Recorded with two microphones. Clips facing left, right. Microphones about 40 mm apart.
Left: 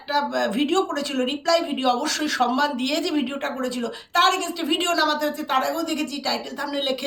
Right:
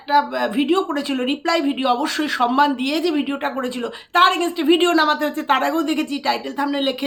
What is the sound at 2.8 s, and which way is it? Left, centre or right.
Speech, centre.